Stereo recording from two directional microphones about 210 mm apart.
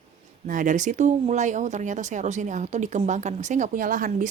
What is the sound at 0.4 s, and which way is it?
Speech, 40° right (ahead or behind).